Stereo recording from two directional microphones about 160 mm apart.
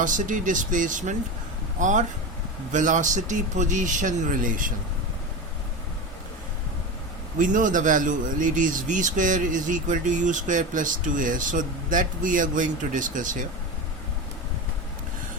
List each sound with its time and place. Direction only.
0.0 s speech: 55° right (ahead or behind)
7.3 s a man's voice: 55° right (ahead or behind)